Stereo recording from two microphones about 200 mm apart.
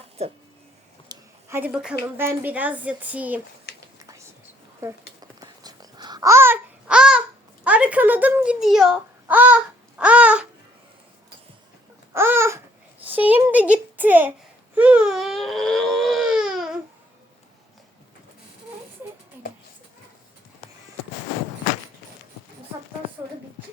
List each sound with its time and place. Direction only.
1.0 s a sound: 15° right (ahead or behind)
2.1 s a woman's voice: 10° right (ahead or behind)
3.9 s whispering: 15° right (ahead or behind)
4.8 s babbling: 15° right (ahead or behind)
7.6 s speech: 5° right (ahead or behind)
12.1 s babbling: 10° right (ahead or behind)
13.1 s a woman's voice: 10° right (ahead or behind)
14.8 s baby cry: 5° right (ahead or behind)